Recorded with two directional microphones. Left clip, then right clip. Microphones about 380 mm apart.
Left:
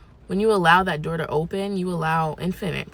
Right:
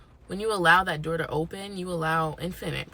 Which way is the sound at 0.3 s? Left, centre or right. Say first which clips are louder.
Left 4 dB; centre.